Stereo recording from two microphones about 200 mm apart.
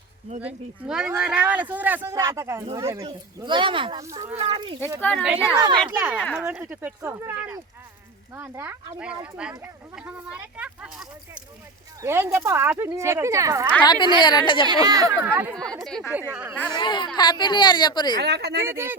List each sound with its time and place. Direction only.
0.4 s speech: 5° right (ahead or behind); by 4.8 s 25° right (ahead or behind)
4.9 s speech: 10° left (ahead or behind)
5.2 s speech: 5° right (ahead or behind)
5.6 s speech: 20° right (ahead or behind)
5.9 s speech: 5° right (ahead or behind)
12.0 s speech: 10° right (ahead or behind)
13.8 s a woman's voice: 20° left (ahead or behind)
14.7 s speech: 20° right (ahead or behind)
15.5 s speech: 5° left (ahead or behind)
16.3 s speech: 10° right (ahead or behind)
16.7 s a woman's voice: 25° left (ahead or behind)
18.2 s speech: 55° right (ahead or behind)
18.6 s speech: 10° right (ahead or behind)